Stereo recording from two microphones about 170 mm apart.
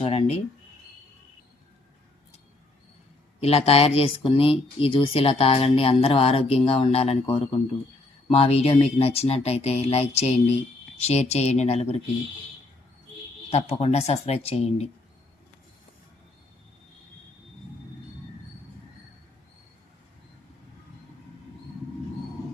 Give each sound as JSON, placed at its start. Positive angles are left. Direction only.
{"t": 0.0, "sound": "speech", "side_deg": 35}
{"t": 3.4, "sound": "speech", "side_deg": 35}
{"t": 13.5, "sound": "speech", "side_deg": 40}